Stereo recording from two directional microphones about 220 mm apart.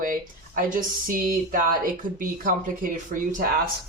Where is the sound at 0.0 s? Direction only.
40° right (ahead or behind).